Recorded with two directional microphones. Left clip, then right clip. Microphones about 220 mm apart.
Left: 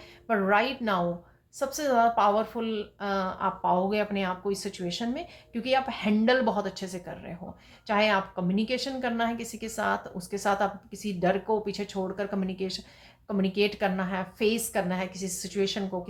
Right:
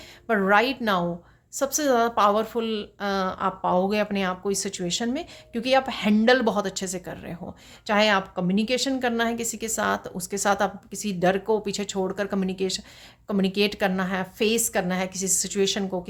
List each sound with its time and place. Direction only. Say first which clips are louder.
0.3 s a woman's voice: right 4 dB; 45° right (ahead or behind)